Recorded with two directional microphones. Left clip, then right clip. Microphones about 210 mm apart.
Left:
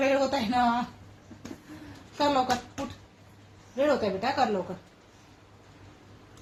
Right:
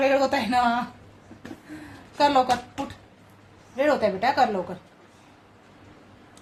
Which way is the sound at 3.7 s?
15° right (ahead or behind).